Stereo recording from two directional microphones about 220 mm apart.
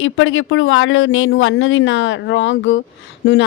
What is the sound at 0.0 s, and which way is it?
Speech, 60° left (ahead or behind).